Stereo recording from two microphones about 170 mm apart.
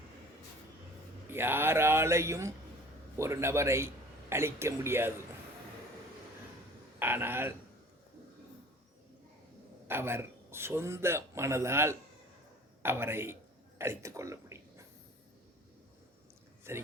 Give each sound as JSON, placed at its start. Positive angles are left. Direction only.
{"t": 1.3, "sound": "a man's voice", "side_deg": -15}
{"t": 7.0, "sound": "a man's voice", "side_deg": -10}
{"t": 9.8, "sound": "a man's voice", "side_deg": -15}
{"t": 13.7, "sound": "a sound", "side_deg": -15}
{"t": 16.7, "sound": "a man's voice", "side_deg": -15}